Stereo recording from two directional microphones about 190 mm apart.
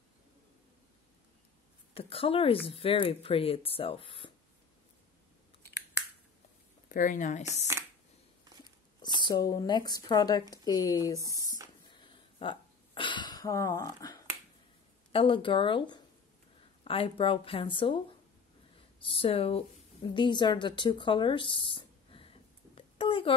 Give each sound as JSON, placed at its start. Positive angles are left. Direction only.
{"t": 2.0, "sound": "speech", "side_deg": 30}
{"t": 6.9, "sound": "speech", "side_deg": 45}
{"t": 9.2, "sound": "speech", "side_deg": 20}
{"t": 11.9, "sound": "a sound", "side_deg": 25}
{"t": 15.1, "sound": "speech", "side_deg": 25}
{"t": 19.0, "sound": "a woman's voice", "side_deg": 30}